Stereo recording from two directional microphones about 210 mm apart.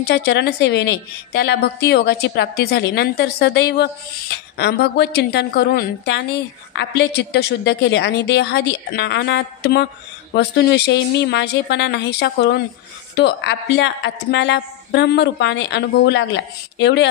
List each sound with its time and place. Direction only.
0.0 s a woman's voice: 55° left (ahead or behind)